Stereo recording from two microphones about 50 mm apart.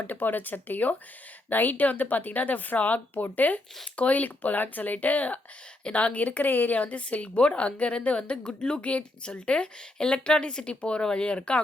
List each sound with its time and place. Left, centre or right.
0.1 s a woman's voice: left